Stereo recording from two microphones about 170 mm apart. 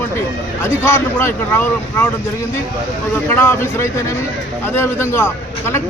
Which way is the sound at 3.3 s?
15° left (ahead or behind).